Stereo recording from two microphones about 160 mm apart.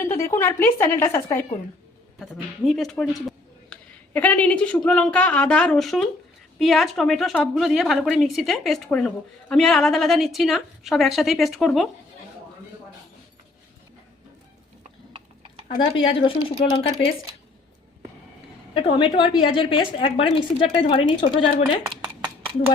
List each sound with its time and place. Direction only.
0.0 s speech: 15° left (ahead or behind)
2.1 s a woman's voice: centre (ahead or behind)
15.8 s a woman's voice: 35° left (ahead or behind)
18.7 s a woman's voice: 35° left (ahead or behind)
22.0 s a sound: 15° right (ahead or behind)